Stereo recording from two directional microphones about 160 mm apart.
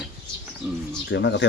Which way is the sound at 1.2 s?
90° left.